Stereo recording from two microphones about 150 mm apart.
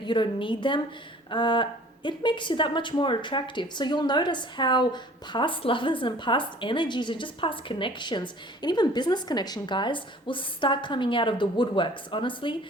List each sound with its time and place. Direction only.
0.0 s a woman's voice: 30° left (ahead or behind)